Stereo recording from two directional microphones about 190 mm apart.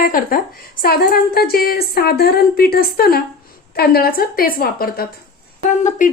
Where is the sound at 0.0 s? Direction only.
50° left (ahead or behind).